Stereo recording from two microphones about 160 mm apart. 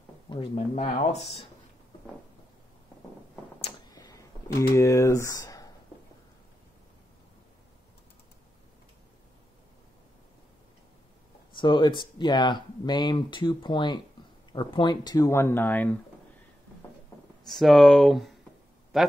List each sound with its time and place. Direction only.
0.3 s speech: 35° left (ahead or behind)
3.9 s a sound: 20° left (ahead or behind)
4.7 s speech: 15° left (ahead or behind)
11.5 s speech: 30° left (ahead or behind); by 16.0 s 10° left (ahead or behind)
17.5 s speech: centre (ahead or behind)